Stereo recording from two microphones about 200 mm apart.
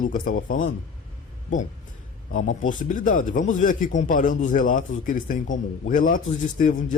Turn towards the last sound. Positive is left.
turn(degrees=40)  # may be behind; listen again after turning